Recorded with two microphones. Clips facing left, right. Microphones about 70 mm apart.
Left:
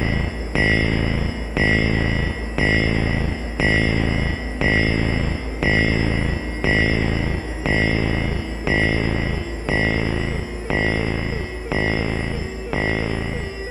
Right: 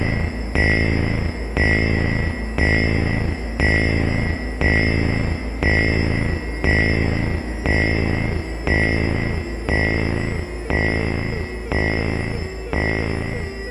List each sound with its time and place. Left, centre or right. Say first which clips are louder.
0.6 s music: even; right
12.9 s music: even; centre